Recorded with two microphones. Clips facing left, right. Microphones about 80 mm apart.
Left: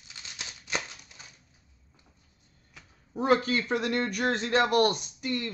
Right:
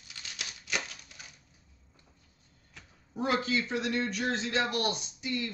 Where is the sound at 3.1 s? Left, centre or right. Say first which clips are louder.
Left 5 dB; left.